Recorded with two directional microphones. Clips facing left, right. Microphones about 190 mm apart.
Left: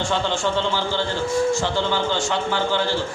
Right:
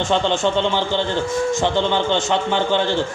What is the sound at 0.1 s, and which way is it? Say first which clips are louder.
A man's voice: right 6 dB; 20° right (ahead or behind).